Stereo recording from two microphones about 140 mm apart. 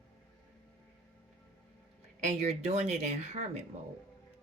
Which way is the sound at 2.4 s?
50° right (ahead or behind).